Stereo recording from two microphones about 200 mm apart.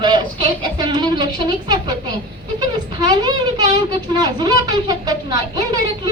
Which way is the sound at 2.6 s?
20° right (ahead or behind).